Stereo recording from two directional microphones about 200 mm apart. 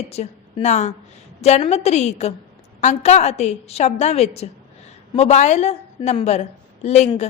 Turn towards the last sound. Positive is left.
turn(degrees=35)  # may be behind; listen again after turning